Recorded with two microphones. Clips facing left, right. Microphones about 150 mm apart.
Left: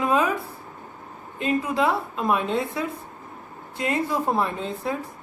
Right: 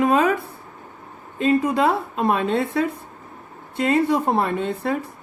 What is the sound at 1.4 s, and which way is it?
Speech, 80° right.